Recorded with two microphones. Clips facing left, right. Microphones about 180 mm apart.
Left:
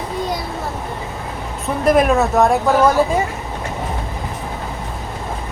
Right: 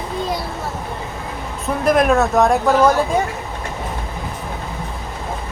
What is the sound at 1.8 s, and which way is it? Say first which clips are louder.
Speech: left 1 dB; centre (ahead or behind).